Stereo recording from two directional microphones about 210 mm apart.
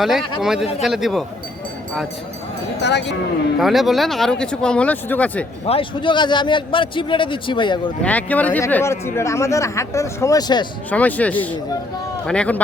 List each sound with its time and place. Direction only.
0.0 s speech: centre (ahead or behind)
2.8 s speech: 55° left (ahead or behind)
3.6 s speech: centre (ahead or behind)
5.6 s a man's voice: 25° left (ahead or behind)
8.0 s speech: 5° left (ahead or behind)
10.9 s speech: 5° left (ahead or behind)